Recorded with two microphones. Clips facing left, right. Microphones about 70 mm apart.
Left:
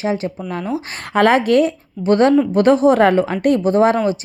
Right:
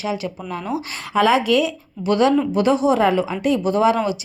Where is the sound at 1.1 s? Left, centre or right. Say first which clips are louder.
Left 3 dB; left.